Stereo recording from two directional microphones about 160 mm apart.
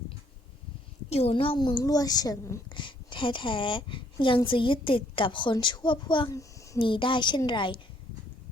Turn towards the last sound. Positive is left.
turn(degrees=30)  # may be behind; listen again after turning